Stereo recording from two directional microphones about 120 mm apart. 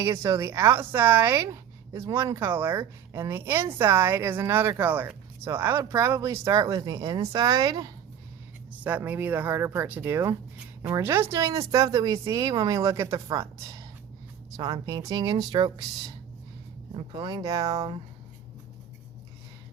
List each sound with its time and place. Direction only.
0.0 s a woman's voice: 25° right (ahead or behind)
8.7 s a woman's voice: 15° right (ahead or behind); by 17.9 s 30° right (ahead or behind)